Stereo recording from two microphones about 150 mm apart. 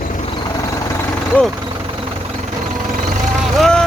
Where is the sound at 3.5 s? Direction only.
5° left (ahead or behind).